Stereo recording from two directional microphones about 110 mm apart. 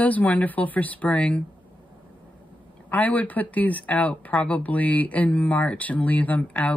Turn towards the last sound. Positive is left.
turn(degrees=10)  # may be behind; listen again after turning